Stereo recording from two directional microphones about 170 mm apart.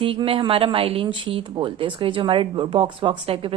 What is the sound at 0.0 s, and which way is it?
A woman's voice, 30° right (ahead or behind).